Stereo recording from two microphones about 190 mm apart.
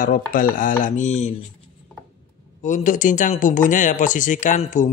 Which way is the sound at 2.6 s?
40° left (ahead or behind).